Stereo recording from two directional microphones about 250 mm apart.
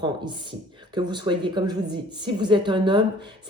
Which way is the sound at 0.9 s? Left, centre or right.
Centre.